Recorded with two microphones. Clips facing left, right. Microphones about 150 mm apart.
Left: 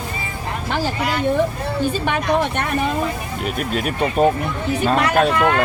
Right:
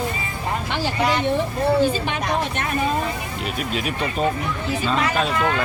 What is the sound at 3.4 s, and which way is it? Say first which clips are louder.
Speech: left 4 dB; 50° left (ahead or behind).